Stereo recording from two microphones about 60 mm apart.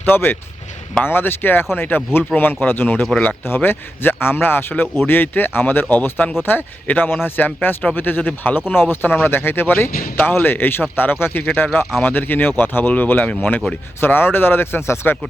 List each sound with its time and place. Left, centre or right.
0.0 s speech: left
3.0 s speech: centre
3.4 s speech: left
14.0 s speech: left